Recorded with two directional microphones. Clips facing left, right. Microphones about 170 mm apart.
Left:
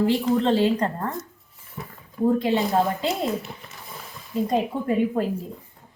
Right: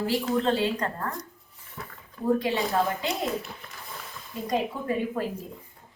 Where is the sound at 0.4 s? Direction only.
25° left (ahead or behind).